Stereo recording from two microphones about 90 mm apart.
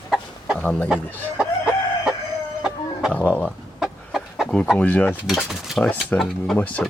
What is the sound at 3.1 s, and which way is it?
Speech, 15° left (ahead or behind).